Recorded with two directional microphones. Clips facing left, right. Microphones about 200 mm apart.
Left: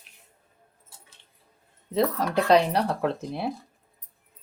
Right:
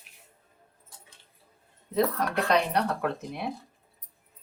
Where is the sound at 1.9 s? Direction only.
30° left (ahead or behind).